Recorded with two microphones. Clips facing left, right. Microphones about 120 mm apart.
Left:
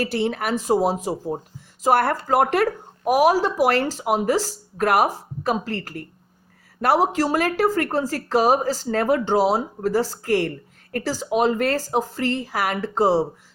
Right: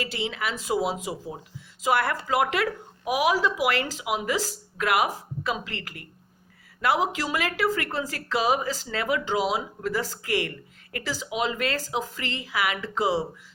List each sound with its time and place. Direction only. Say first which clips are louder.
0.0 s speech: left 7 dB; 50° left (ahead or behind)